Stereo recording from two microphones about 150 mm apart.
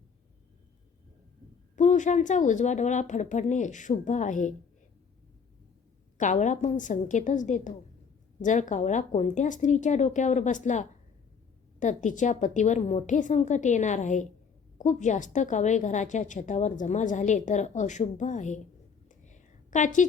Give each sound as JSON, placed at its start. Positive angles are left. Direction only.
{"t": 1.7, "sound": "a woman's voice", "side_deg": 55}
{"t": 6.1, "sound": "a woman's voice", "side_deg": 55}
{"t": 19.0, "sound": "whispering", "side_deg": 55}